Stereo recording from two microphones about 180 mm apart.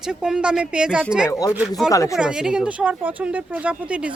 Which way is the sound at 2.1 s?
5° right (ahead or behind).